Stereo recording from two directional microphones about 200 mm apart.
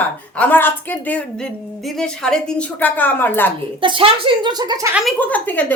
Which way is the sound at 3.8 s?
25° right (ahead or behind).